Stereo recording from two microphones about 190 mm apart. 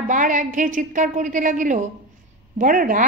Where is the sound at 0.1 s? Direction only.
45° right (ahead or behind).